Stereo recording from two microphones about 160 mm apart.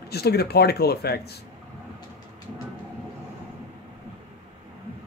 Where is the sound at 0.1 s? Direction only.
90° left.